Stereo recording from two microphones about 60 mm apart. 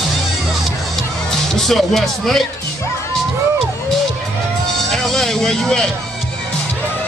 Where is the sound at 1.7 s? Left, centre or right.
Centre.